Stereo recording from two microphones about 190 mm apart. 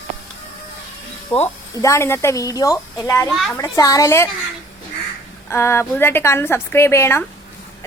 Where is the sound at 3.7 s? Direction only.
20° left (ahead or behind).